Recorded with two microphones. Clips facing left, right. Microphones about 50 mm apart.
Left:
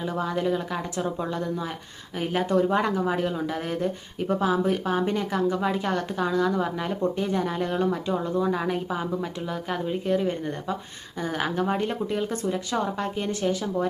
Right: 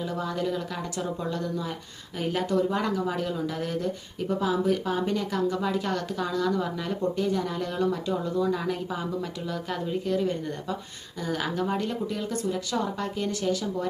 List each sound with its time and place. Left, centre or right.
0.0 s speech: left